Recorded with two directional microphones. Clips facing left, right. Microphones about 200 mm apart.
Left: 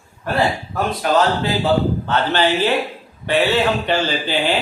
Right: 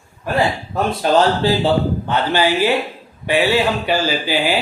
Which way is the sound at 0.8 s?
30° right (ahead or behind).